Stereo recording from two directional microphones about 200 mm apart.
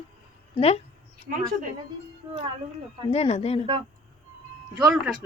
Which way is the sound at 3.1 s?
30° left (ahead or behind).